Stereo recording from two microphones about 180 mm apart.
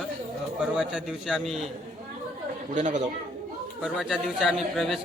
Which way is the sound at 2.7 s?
40° right (ahead or behind).